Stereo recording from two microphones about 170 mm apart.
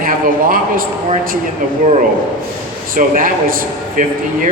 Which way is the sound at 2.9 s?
50° right (ahead or behind).